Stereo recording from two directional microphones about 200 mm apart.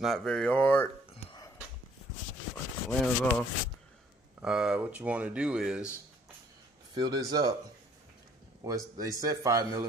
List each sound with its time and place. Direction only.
0.0 s speech: centre (ahead or behind)
2.9 s speech: 5° left (ahead or behind)
6.9 s speech: 20° right (ahead or behind)
8.6 s a man's voice: 15° right (ahead or behind)